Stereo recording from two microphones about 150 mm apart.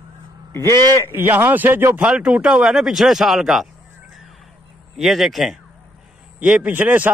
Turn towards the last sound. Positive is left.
turn(degrees=-10)  # may be behind; listen again after turning